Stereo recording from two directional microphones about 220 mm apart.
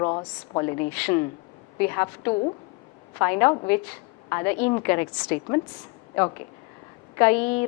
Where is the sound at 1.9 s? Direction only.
15° left (ahead or behind).